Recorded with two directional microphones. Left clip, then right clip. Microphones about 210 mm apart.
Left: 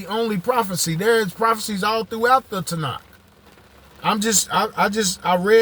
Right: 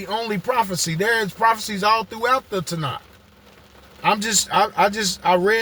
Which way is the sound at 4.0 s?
20° left (ahead or behind).